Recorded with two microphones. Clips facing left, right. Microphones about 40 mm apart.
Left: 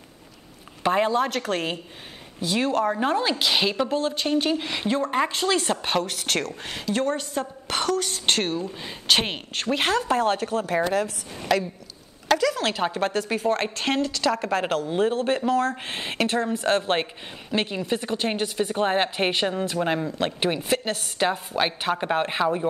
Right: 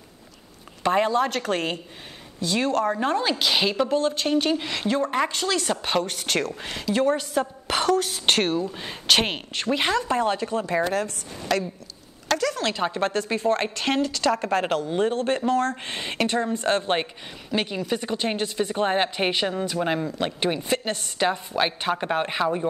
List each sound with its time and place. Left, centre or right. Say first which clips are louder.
0.8 s a woman's voice: even; centre
4.6 s speech: right 1 dB; centre
5.9 s a woman's voice: right 1 dB; centre
9.0 s a woman's voice: right 1 dB; centre
17.5 s a woman's voice: even; centre